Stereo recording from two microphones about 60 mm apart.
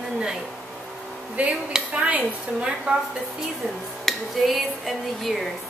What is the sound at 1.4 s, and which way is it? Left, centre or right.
A woman's voice, right.